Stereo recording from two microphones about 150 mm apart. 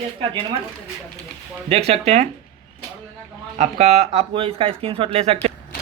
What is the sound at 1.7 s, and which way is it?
Speech, 40° right (ahead or behind).